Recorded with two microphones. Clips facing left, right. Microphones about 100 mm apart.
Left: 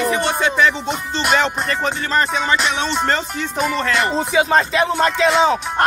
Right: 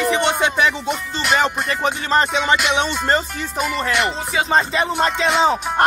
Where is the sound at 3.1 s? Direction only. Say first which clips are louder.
Even; 5° right (ahead or behind).